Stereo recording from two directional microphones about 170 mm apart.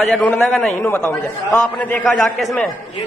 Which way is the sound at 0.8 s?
15° left (ahead or behind).